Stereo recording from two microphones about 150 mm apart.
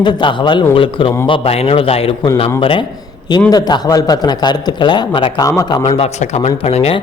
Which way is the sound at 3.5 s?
25° left (ahead or behind).